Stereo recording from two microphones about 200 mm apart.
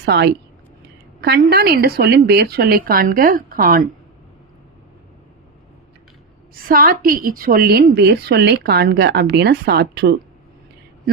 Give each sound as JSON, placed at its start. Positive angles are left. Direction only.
{"t": 0.0, "sound": "a woman's voice", "side_deg": -55}
{"t": 6.7, "sound": "a woman's voice", "side_deg": -45}